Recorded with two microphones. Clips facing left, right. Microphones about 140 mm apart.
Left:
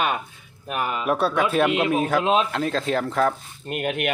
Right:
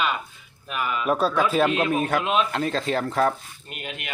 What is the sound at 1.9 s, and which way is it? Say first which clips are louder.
Speech: left 3 dB; centre (ahead or behind).